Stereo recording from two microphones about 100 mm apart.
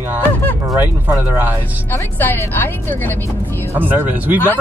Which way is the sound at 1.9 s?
20° left (ahead or behind).